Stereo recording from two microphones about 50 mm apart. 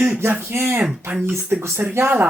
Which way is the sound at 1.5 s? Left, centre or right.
Right.